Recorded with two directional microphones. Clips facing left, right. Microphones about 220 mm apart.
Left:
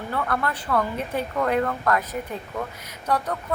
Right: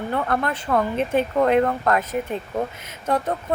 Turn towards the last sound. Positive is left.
turn(degrees=-25)  # may be behind; listen again after turning